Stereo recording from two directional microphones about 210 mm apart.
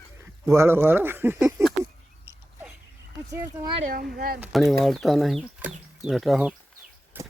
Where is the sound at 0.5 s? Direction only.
10° right (ahead or behind).